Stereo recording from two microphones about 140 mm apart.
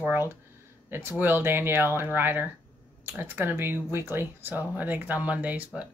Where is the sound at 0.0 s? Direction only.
15° right (ahead or behind).